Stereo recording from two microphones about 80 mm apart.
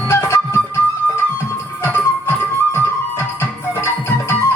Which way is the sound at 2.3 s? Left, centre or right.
Left.